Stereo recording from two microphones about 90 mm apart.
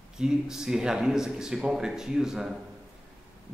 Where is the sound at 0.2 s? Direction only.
5° right (ahead or behind).